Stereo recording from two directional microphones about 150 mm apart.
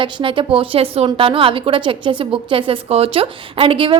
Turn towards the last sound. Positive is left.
turn(degrees=-35)  # may be behind; listen again after turning